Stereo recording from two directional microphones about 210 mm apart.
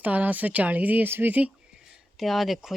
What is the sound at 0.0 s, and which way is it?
Speech, 5° right (ahead or behind).